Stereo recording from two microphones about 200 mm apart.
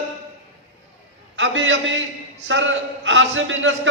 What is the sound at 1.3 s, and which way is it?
A man's voice, 65° right (ahead or behind).